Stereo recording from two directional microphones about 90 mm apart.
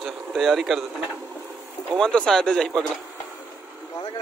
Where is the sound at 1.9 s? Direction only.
5° left (ahead or behind).